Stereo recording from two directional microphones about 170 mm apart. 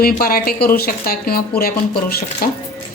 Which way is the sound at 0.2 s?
60° left (ahead or behind).